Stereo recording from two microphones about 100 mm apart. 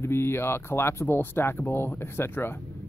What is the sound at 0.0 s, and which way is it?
Speech, 25° left (ahead or behind).